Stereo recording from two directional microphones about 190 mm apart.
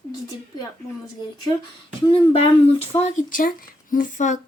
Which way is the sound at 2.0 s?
25° left (ahead or behind).